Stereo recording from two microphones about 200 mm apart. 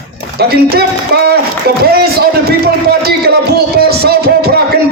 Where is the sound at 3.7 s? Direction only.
50° right (ahead or behind).